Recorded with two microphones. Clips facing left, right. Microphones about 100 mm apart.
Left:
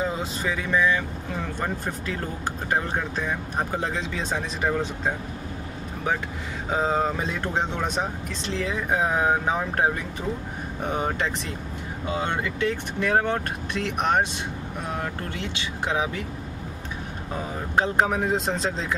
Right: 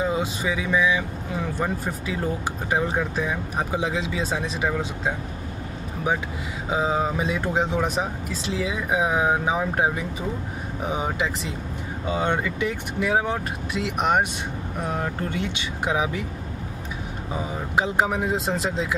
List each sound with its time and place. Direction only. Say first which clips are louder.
0.0 s speech: right 3 dB; 10° right (ahead or behind)
6.7 s speech: even; 5° right (ahead or behind)
17.3 s speech: right 2 dB; 10° right (ahead or behind)